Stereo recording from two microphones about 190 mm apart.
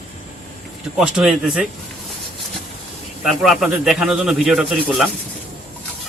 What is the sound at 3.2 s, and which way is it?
Speech, centre (ahead or behind).